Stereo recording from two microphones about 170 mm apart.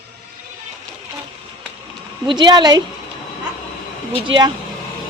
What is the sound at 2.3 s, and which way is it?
Speech, 25° right (ahead or behind).